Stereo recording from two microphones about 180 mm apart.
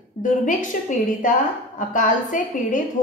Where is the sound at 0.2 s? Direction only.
45° left (ahead or behind).